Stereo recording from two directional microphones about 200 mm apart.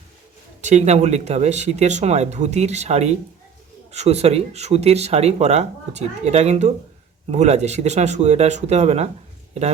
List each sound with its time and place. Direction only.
0.6 s speech: 35° right (ahead or behind)